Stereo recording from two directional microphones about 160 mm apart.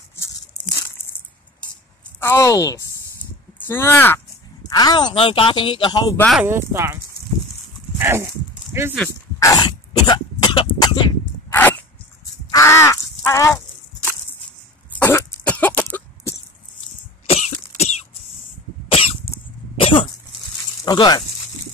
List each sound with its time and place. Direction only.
0.1 s a sound: 20° left (ahead or behind)
2.1 s speech: 15° left (ahead or behind)
4.6 s speech: 25° left (ahead or behind)
6.1 s speech: 5° left (ahead or behind)
6.4 s speech: 15° right (ahead or behind)
8.0 s speech: 15° right (ahead or behind)
9.6 s cough: 25° left (ahead or behind)
12.4 s a sound: 20° left (ahead or behind)
15.0 s cough: 10° left (ahead or behind)
17.3 s cough: 40° left (ahead or behind)
20.8 s speech: 25° left (ahead or behind)